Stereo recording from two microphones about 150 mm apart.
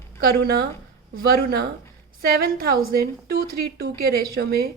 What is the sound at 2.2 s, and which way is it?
A woman's voice, 80° right.